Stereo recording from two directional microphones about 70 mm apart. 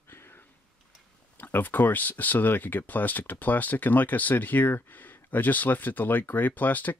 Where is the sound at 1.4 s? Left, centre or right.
Left.